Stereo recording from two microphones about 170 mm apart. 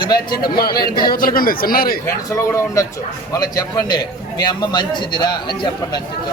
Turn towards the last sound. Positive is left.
turn(degrees=25)  # may be behind; listen again after turning